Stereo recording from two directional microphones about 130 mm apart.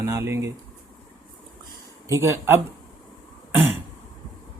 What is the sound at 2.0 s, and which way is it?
Speech, 20° right (ahead or behind).